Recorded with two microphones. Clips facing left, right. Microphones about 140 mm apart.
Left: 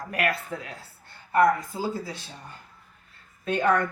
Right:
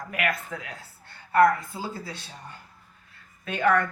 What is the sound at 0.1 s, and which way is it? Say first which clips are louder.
Speech: left 2 dB; 35° left (ahead or behind).